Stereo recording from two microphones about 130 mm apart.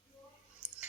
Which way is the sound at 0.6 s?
10° right (ahead or behind).